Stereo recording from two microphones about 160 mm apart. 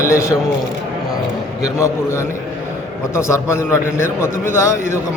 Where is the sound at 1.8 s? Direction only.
20° left (ahead or behind).